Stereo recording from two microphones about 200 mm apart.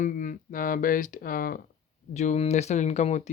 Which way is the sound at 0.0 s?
40° left (ahead or behind).